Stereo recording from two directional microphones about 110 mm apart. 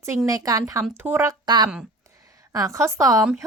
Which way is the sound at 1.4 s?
40° right (ahead or behind).